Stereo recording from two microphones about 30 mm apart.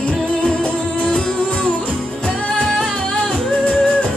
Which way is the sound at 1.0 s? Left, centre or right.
Left.